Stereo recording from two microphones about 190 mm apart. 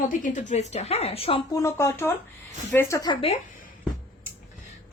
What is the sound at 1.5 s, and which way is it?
A woman's voice, 15° left (ahead or behind).